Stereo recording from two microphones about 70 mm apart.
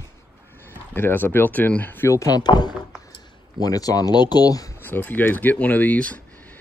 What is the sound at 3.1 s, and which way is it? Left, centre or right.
Speech, left.